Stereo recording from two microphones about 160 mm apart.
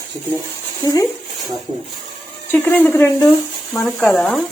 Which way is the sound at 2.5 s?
10° left (ahead or behind).